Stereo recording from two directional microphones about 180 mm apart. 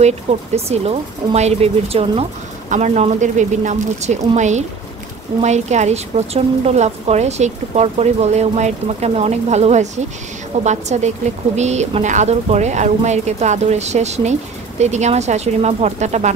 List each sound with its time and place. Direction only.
0.0 s a woman's voice: 35° right (ahead or behind)